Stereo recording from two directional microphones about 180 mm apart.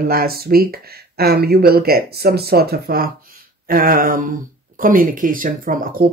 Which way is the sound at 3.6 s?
50° right (ahead or behind).